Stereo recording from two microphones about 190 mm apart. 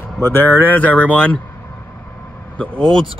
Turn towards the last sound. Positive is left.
turn(degrees=5)  # may be behind; listen again after turning